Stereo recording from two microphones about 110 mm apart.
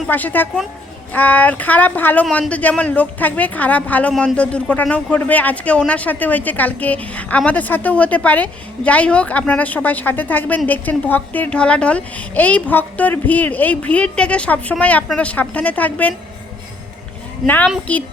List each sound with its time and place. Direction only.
0.1 s a woman's voice: 15° left (ahead or behind)
17.4 s a woman's voice: 15° left (ahead or behind)